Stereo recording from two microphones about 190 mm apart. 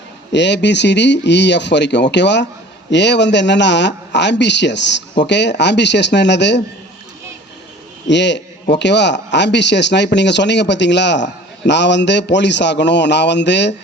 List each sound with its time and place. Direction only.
0.3 s speech: 65° left (ahead or behind)
8.0 s speech: 65° left (ahead or behind)